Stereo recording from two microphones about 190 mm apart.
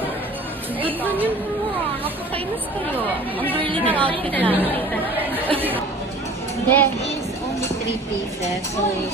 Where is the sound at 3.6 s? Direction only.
25° right (ahead or behind).